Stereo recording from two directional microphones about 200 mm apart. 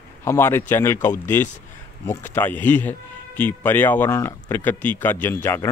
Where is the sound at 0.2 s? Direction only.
10° left (ahead or behind).